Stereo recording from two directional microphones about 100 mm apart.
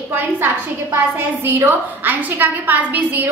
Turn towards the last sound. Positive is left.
turn(degrees=-20)  # may be behind; listen again after turning